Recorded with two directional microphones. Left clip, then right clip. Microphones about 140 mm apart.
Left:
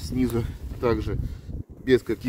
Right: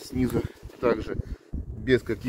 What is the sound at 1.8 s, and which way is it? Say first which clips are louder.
Speech: left 2 dB; 40° left (ahead or behind).